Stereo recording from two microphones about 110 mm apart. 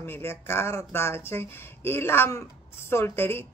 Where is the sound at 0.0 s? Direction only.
20° left (ahead or behind).